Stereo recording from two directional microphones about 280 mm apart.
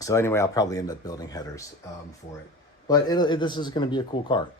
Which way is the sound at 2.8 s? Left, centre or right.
Centre.